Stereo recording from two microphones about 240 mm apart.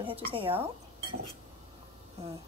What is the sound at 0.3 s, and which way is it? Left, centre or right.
Speech, right.